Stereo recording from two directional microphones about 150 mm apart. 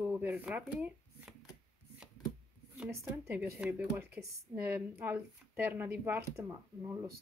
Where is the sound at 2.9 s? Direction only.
15° right (ahead or behind).